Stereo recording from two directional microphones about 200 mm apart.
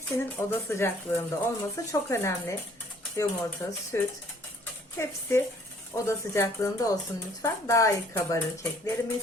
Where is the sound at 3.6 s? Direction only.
15° left (ahead or behind).